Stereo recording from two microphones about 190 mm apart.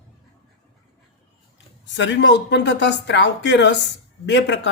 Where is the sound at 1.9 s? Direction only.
75° left (ahead or behind).